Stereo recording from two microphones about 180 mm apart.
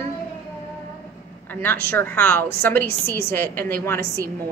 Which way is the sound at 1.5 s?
10° left (ahead or behind).